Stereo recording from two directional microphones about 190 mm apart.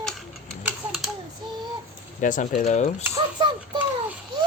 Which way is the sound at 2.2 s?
45° left (ahead or behind).